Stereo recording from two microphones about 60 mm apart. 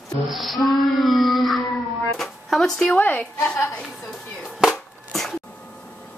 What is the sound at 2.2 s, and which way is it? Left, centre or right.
Speech, centre.